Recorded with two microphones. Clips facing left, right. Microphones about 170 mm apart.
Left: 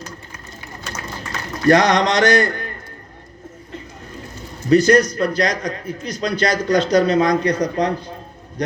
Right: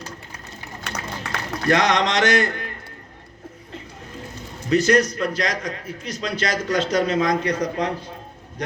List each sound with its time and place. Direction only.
0.9 s run: 65° right (ahead or behind)
1.6 s a man's voice: 35° left (ahead or behind)
4.7 s a man's voice: 35° left (ahead or behind)